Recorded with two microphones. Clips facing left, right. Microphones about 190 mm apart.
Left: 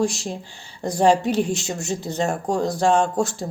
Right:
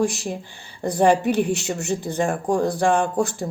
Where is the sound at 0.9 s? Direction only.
60° right (ahead or behind).